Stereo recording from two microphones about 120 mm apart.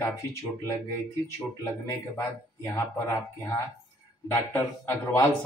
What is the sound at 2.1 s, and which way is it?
Speech, 25° left (ahead or behind).